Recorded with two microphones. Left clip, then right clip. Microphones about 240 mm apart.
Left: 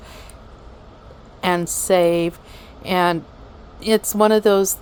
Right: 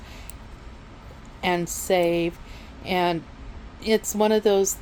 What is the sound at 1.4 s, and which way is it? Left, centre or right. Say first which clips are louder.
A woman's voice: left 4 dB; centre.